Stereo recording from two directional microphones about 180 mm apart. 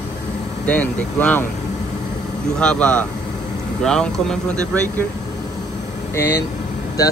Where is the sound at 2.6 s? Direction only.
5° left (ahead or behind).